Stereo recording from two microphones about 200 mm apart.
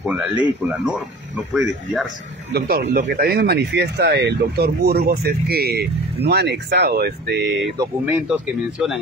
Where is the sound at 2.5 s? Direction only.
50° right (ahead or behind).